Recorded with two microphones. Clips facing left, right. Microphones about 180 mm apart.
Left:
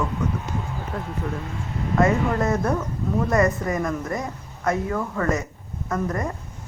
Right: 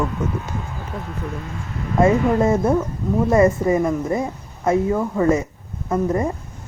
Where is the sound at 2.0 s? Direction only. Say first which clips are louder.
Right 5 dB; 25° right (ahead or behind).